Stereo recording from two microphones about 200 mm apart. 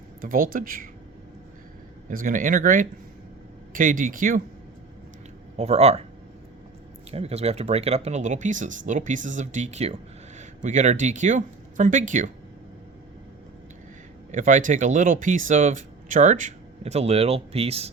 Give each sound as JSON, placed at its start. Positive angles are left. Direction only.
{"t": 0.2, "sound": "speech", "side_deg": -45}
{"t": 2.0, "sound": "speech", "side_deg": -40}
{"t": 5.5, "sound": "speech", "side_deg": -30}
{"t": 7.1, "sound": "speech", "side_deg": -30}
{"t": 14.3, "sound": "speech", "side_deg": -40}